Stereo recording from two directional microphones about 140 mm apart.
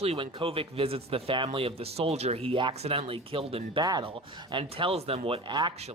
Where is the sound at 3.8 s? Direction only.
30° right (ahead or behind).